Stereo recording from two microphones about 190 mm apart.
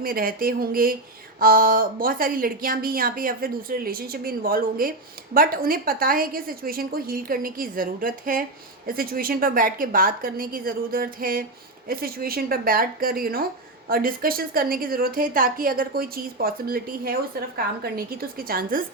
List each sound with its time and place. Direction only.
0.0 s a woman's voice: 50° right (ahead or behind)